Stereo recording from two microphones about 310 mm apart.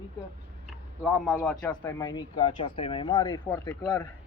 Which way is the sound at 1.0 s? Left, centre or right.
Centre.